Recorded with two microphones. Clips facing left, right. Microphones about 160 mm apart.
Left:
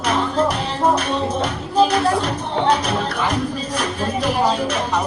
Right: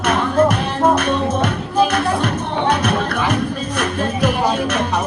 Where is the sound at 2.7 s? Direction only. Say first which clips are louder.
Right 3 dB; 60° right (ahead or behind).